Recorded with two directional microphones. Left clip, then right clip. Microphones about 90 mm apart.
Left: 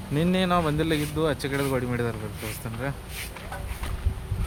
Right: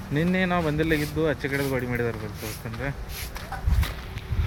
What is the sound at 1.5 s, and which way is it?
Speech, 25° left (ahead or behind).